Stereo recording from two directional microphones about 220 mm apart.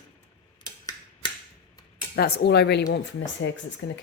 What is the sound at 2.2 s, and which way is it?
Speech, 50° left (ahead or behind).